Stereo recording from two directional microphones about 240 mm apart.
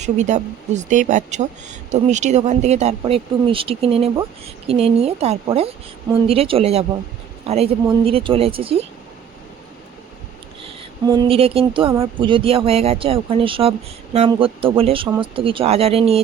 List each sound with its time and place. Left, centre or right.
0.0 s speech: right
10.6 s speech: centre